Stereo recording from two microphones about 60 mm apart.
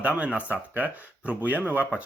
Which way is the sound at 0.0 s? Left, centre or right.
Right.